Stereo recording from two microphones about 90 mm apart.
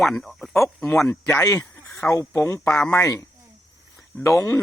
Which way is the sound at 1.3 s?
35° left (ahead or behind).